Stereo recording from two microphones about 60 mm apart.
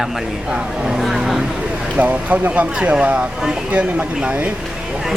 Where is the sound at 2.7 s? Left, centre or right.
Centre.